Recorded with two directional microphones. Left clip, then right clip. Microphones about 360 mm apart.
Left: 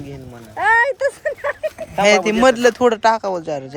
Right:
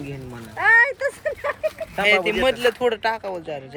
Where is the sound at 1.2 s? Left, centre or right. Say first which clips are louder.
Left 3 dB; left.